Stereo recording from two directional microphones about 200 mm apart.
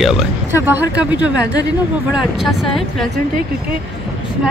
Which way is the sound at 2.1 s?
Centre (ahead or behind).